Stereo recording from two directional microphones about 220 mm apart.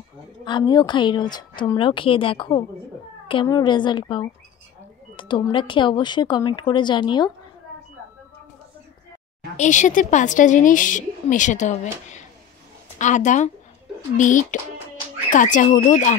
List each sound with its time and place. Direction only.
0.5 s speech: 20° left (ahead or behind)
9.6 s a woman's voice: 35° left (ahead or behind)